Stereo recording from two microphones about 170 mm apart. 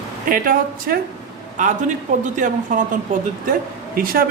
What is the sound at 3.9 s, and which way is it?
Speech, 60° right (ahead or behind).